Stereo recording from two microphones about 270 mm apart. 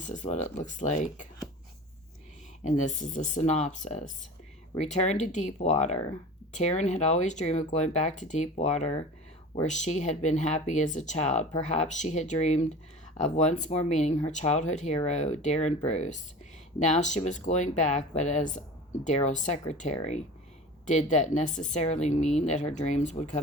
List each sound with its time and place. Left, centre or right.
0.0 s speech: left
3.0 s speech: left